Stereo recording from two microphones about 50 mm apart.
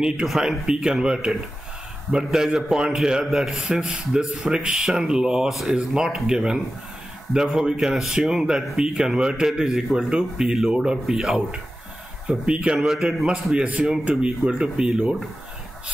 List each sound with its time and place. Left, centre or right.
0.3 s a man's voice: centre
5.5 s speech: centre
5.8 s a man's voice: centre
12.3 s speech: right
12.7 s a man's voice: centre
13.3 s a man's voice: centre